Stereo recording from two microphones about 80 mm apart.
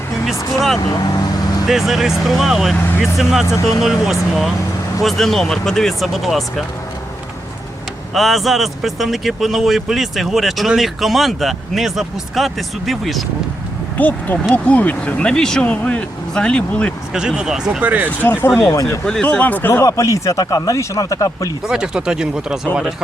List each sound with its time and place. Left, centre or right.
0.8 s vehicle: left
1.6 s speech: centre
2.7 s speech: left
3.0 s speech: centre
8.1 s speech: centre
14.0 s speech: left
15.7 s speech: centre
17.2 s speech: centre
18.2 s speech: left
18.7 s speech: left
19.0 s speech: centre
19.8 s speech: left
21.7 s speech: centre